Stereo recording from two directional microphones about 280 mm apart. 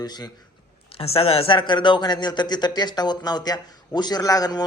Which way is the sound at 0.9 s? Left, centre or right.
Left.